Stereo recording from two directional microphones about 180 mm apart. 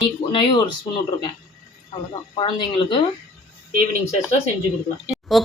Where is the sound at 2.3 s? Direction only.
30° left (ahead or behind).